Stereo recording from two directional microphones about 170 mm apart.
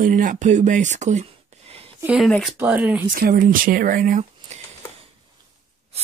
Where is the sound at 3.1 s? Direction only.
55° right (ahead or behind).